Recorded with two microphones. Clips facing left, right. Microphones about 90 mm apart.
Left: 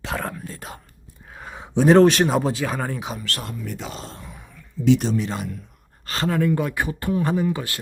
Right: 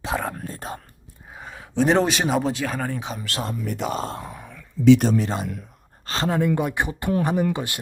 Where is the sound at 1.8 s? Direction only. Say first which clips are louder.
Left 5 dB; centre (ahead or behind).